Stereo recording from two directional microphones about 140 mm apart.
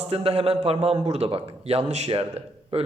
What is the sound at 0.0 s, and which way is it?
A man's voice, 45° right (ahead or behind).